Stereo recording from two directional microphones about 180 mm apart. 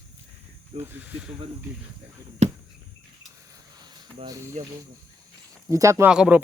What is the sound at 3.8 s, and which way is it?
Cricket, 20° right (ahead or behind).